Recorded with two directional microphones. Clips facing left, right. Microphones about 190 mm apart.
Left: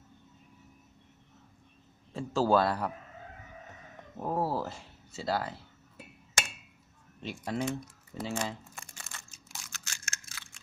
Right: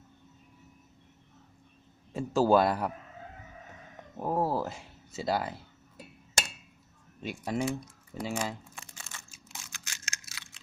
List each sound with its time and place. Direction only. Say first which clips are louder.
2.1 s speech: right 2 dB; 15° right (ahead or behind)
4.2 s speech: right 2 dB; 10° right (ahead or behind)
7.2 s speech: right 2 dB; 10° right (ahead or behind)
8.2 s crumpling: right 1 dB; 10° right (ahead or behind)